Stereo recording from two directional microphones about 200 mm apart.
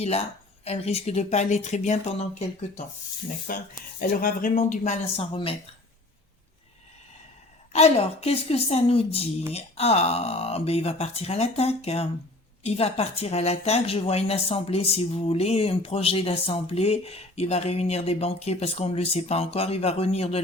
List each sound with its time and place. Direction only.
0.6 s a woman's voice: 30° left (ahead or behind)
7.7 s a woman's voice: 30° left (ahead or behind)